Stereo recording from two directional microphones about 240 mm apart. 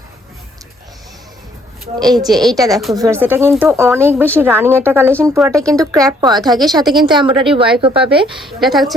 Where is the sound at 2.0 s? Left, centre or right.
Centre.